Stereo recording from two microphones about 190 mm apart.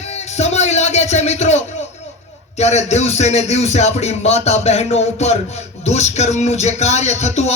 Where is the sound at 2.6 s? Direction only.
35° left (ahead or behind).